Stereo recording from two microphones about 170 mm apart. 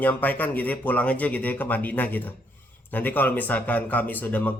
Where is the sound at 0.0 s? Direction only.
10° left (ahead or behind).